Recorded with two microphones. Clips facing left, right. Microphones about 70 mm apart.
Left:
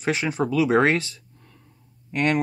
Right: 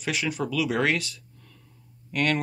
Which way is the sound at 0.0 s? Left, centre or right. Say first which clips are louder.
Left 4 dB; left.